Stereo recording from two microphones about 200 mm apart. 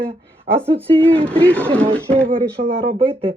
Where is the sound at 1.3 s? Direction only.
5° left (ahead or behind).